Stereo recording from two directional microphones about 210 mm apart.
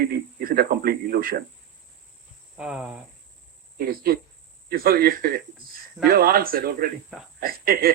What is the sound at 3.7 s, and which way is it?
Speech, 45° right (ahead or behind).